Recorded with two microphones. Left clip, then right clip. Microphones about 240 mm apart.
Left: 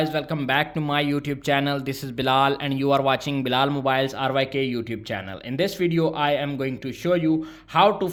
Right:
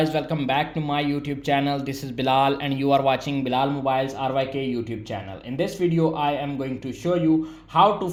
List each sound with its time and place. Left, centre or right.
0.0 s speech: centre; by 8.1 s left